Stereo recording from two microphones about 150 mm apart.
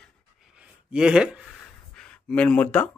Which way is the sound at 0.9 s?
5° right (ahead or behind).